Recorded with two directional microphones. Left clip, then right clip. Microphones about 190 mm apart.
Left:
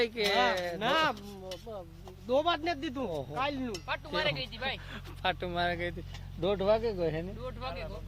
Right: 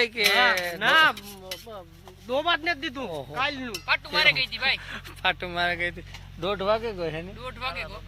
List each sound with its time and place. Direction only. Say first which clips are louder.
0.0 s speech: right 7 dB; 10° right (ahead or behind)
0.8 s speech: right 11 dB; centre (ahead or behind)
2.2 s speech: right 4 dB; 5° right (ahead or behind)
3.8 s speech: right 11 dB; 25° left (ahead or behind)
4.9 s speech: right 7 dB; 15° right (ahead or behind)